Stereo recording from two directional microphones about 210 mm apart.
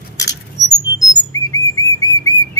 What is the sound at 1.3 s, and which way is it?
Bird, 15° left (ahead or behind).